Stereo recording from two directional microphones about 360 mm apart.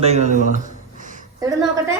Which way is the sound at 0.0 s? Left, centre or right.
Centre.